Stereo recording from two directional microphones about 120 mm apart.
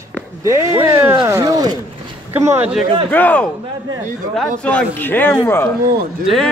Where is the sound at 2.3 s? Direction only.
20° right (ahead or behind).